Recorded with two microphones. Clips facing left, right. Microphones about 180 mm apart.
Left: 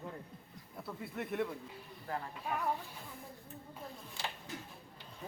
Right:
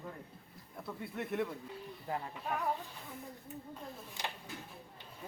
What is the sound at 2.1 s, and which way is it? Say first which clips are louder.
Speech: right 1 dB; 20° right (ahead or behind).